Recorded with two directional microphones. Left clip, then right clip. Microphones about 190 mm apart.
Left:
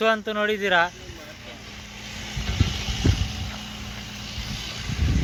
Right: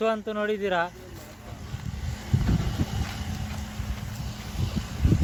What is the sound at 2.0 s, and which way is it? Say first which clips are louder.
Vehicle: left 2 dB; 30° right (ahead or behind).